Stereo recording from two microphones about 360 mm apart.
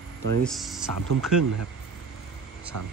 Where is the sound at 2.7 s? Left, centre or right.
Right.